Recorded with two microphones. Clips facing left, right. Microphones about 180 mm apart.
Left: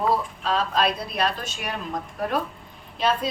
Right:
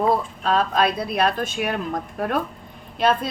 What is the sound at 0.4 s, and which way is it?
A woman's voice, 55° right (ahead or behind).